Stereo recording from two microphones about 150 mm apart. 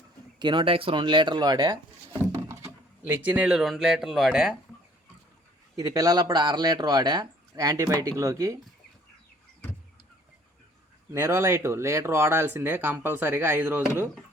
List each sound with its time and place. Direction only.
0.3 s speech: 30° right (ahead or behind)
2.1 s a sound: 20° right (ahead or behind)
3.2 s speech: 10° right (ahead or behind)
5.7 s speech: 20° right (ahead or behind)
11.1 s speech: 15° right (ahead or behind)